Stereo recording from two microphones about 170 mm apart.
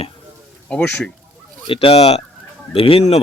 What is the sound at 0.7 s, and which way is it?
Speech, 5° left (ahead or behind).